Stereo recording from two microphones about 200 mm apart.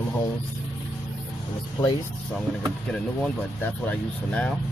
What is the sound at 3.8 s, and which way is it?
Speech, 5° left (ahead or behind).